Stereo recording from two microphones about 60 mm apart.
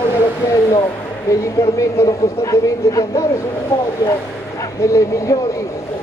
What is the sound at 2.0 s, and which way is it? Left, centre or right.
Speech, left.